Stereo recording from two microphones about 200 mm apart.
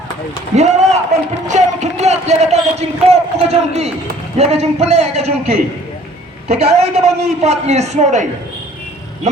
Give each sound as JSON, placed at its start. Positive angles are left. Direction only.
{"t": 0.5, "sound": "a man's voice", "side_deg": -35}